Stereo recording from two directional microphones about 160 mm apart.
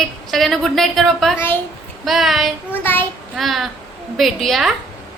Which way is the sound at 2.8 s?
15° left (ahead or behind).